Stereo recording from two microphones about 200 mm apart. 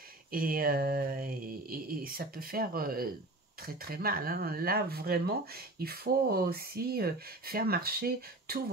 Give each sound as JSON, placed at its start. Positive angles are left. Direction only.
{"t": 0.3, "sound": "speech", "side_deg": -45}